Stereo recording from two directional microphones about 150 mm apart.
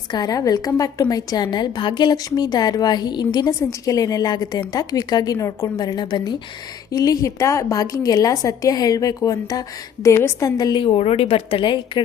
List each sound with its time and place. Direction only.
0.1 s a woman's voice: 25° left (ahead or behind)